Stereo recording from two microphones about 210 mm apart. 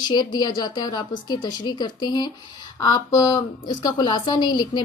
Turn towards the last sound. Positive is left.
turn(degrees=20)  # may be behind; listen again after turning